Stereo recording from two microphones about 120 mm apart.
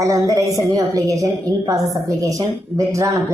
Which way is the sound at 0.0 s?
30° right (ahead or behind).